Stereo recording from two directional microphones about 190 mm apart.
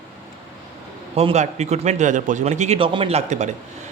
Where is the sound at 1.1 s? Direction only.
35° right (ahead or behind).